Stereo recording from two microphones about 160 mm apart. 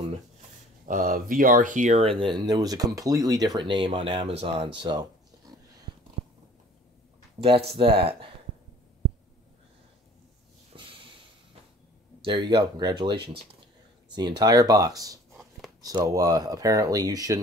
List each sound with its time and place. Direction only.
0.8 s speech: 60° right (ahead or behind)
2.0 s speech: 35° right (ahead or behind)
7.3 s speech: 35° right (ahead or behind)
10.7 s snort: 35° right (ahead or behind)
12.2 s speech: 30° right (ahead or behind)